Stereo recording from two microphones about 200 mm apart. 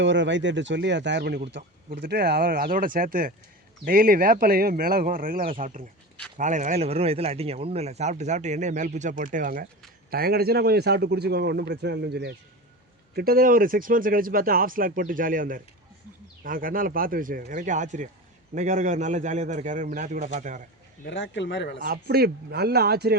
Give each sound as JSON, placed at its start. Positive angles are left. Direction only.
{"t": 0.0, "sound": "speech", "side_deg": -65}
{"t": 21.1, "sound": "speech", "side_deg": 65}
{"t": 21.8, "sound": "speech", "side_deg": -50}